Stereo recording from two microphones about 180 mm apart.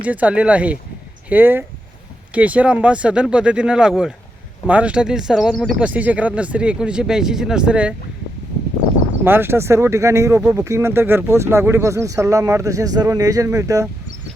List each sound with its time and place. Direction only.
0.0 s speech: 10° right (ahead or behind)
9.2 s speech: 10° right (ahead or behind)